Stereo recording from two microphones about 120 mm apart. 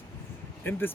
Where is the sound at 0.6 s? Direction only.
15° left (ahead or behind).